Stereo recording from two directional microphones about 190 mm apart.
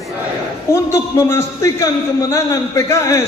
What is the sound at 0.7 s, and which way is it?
A man's voice, 15° left (ahead or behind).